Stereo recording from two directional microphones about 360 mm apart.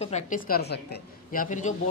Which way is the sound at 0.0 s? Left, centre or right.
Centre.